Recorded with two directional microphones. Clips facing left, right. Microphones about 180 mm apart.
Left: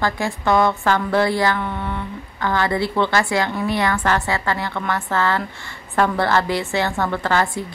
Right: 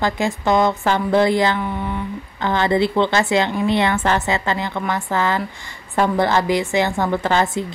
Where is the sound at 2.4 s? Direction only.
25° right (ahead or behind).